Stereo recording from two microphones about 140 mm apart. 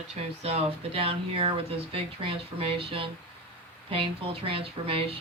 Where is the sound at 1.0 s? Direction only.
40° right (ahead or behind).